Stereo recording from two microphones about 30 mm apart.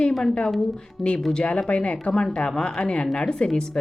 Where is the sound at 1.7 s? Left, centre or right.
Left.